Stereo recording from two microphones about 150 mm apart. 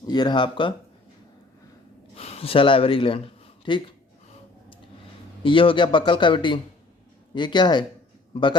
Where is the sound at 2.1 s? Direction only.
45° left (ahead or behind).